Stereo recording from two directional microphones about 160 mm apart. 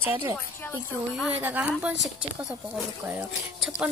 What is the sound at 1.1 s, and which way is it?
Speech, 5° right (ahead or behind).